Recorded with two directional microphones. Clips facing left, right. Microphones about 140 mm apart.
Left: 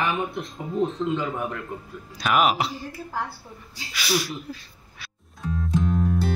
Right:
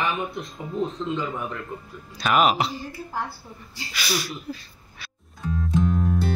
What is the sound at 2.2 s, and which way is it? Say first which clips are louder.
Speech: right 1 dB; 5° left (ahead or behind).